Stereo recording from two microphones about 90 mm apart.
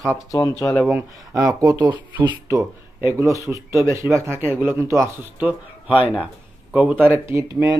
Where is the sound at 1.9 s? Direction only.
60° right (ahead or behind).